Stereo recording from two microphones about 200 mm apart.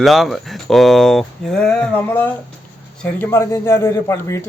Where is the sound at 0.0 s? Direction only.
Centre (ahead or behind).